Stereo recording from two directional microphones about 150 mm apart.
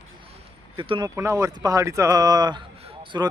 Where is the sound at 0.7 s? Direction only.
35° right (ahead or behind).